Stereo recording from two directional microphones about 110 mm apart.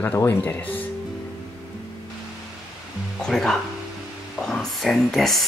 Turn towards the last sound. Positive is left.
turn(degrees=0)  # may be behind; listen again after turning